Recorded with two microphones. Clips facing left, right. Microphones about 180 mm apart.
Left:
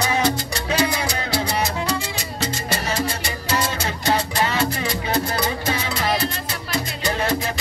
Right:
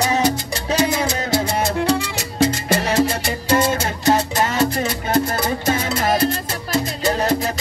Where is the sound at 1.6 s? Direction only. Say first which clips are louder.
Right 5 dB; 60° right (ahead or behind).